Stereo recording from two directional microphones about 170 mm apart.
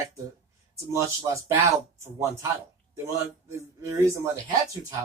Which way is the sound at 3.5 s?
15° right (ahead or behind).